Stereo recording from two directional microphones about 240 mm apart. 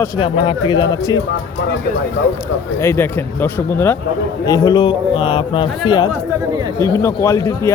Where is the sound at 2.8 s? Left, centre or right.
Centre.